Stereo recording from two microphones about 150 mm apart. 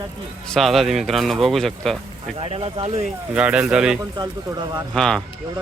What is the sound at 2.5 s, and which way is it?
Speech, 40° right (ahead or behind).